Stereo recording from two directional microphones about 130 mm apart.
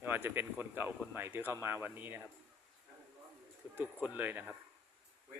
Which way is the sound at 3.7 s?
15° right (ahead or behind).